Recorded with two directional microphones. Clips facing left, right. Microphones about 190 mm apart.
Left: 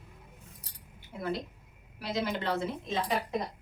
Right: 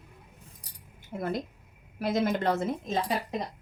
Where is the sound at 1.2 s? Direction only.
50° right (ahead or behind).